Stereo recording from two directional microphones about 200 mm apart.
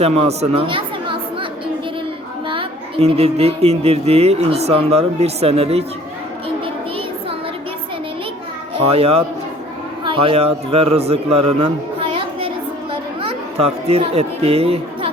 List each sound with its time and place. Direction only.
0.0 s speech: 30° right (ahead or behind)
2.5 s a woman's voice: 25° right (ahead or behind)
8.7 s a man's voice: 30° right (ahead or behind)
11.6 s a sound: 25° right (ahead or behind)
12.9 s children playing: 30° right (ahead or behind)